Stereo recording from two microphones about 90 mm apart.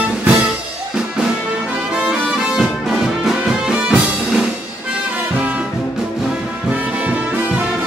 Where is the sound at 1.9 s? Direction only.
10° right (ahead or behind).